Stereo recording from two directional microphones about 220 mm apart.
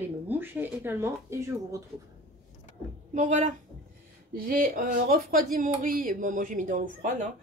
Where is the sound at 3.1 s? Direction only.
35° right (ahead or behind).